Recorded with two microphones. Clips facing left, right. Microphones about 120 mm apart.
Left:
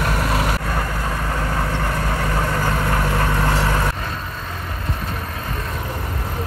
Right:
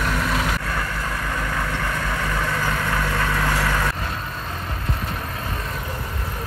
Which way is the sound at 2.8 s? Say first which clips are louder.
Left 3 dB; 30° left (ahead or behind).